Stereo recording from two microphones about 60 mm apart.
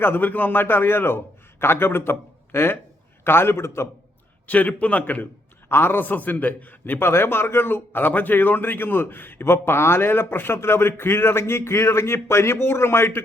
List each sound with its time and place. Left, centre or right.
0.0 s a man's voice: left
4.4 s a man's voice: left
5.6 s a man's voice: left